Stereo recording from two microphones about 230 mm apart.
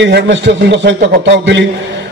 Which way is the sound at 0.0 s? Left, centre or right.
Right.